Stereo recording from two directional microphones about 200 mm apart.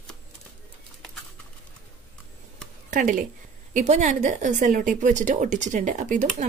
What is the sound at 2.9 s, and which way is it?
A woman's voice, 40° right (ahead or behind).